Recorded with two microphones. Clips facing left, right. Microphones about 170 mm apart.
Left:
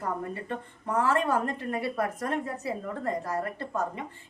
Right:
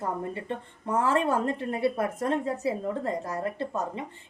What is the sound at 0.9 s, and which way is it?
A woman's voice, 25° right (ahead or behind).